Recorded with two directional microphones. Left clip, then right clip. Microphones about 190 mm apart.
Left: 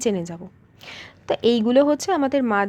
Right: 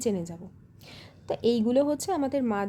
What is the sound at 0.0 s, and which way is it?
A woman's voice, 5° left (ahead or behind).